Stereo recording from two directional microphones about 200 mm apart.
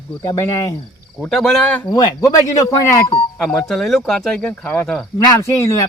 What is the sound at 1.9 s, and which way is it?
Cricket, 20° left (ahead or behind).